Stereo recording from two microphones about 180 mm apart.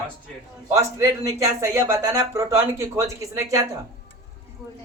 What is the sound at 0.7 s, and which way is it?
Speech, 15° right (ahead or behind).